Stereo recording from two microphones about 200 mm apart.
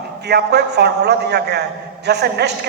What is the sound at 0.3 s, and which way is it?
A man's voice, 55° right (ahead or behind).